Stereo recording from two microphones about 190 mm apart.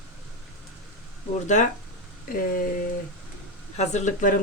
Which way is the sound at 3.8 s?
40° left (ahead or behind).